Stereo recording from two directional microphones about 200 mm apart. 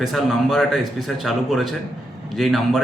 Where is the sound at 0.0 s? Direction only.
Centre (ahead or behind).